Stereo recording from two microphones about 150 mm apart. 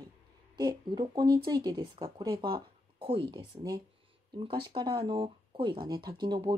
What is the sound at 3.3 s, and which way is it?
Speech, 30° right (ahead or behind).